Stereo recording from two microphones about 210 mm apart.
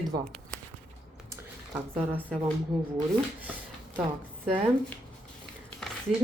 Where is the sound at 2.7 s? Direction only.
Centre (ahead or behind).